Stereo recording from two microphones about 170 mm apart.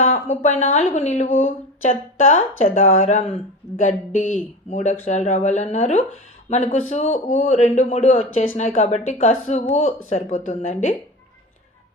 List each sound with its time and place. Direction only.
0.0 s a man's voice: 45° left (ahead or behind)